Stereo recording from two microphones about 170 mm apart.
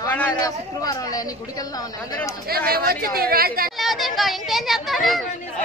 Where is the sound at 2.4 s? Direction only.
65° right (ahead or behind).